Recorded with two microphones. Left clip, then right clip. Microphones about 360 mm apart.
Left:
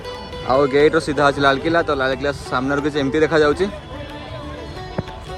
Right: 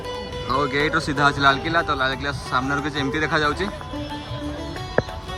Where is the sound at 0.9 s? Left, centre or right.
Centre.